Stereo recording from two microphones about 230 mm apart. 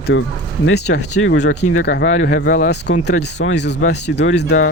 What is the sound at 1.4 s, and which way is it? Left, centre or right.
Speech, left.